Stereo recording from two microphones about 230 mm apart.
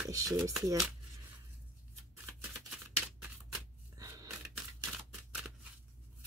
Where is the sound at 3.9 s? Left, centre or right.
Centre.